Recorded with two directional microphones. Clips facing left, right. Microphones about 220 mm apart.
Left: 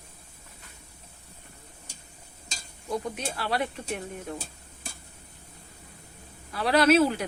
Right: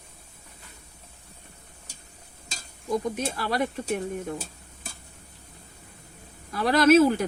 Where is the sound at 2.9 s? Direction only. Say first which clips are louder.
Right 4 dB; 45° right (ahead or behind).